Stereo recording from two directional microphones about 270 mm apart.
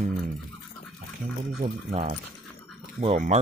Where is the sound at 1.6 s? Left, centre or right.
Right.